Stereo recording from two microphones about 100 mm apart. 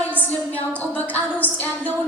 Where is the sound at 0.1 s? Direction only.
15° left (ahead or behind).